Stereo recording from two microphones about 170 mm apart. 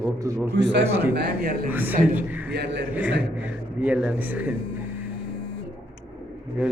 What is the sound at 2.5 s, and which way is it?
Speech, 80° right.